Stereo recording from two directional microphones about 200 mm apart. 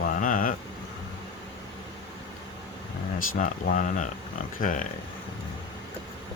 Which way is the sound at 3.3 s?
40° left (ahead or behind).